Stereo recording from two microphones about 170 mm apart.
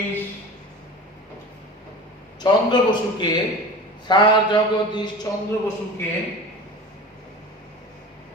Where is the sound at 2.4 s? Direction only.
25° left (ahead or behind).